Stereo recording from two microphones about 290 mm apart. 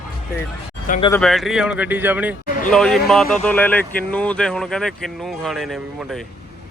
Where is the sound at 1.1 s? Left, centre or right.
Centre.